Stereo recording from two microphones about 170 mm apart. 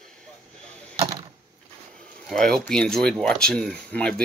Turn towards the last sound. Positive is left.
turn(degrees=5)  # may be behind; listen again after turning